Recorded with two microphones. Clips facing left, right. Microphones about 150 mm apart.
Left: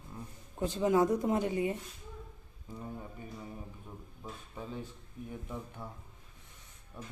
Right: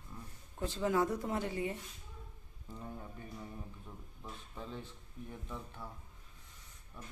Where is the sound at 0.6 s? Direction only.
15° left (ahead or behind).